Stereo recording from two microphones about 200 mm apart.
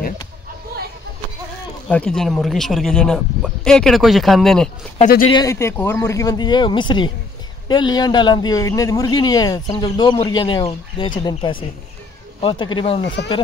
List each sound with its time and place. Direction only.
1.9 s speech: 5° left (ahead or behind)
5.3 s a man's voice: 15° left (ahead or behind)